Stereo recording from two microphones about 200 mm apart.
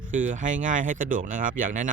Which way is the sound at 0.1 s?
40° right (ahead or behind).